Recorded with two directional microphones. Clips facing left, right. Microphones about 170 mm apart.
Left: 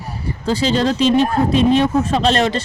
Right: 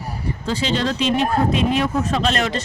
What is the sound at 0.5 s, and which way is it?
Speech, 35° left (ahead or behind).